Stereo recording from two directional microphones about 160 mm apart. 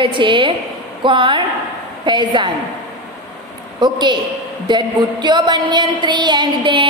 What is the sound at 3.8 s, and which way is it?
A woman's voice, 30° right (ahead or behind).